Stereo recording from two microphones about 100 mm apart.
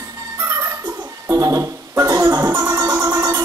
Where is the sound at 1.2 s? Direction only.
30° right (ahead or behind).